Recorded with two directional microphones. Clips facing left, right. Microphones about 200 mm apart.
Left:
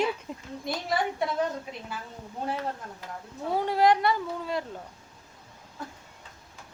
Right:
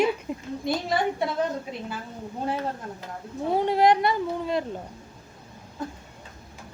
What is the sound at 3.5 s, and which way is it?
Speech, 20° right (ahead or behind).